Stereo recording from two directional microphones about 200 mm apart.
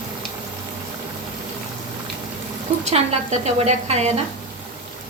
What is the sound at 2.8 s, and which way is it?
A woman's voice, 30° right (ahead or behind).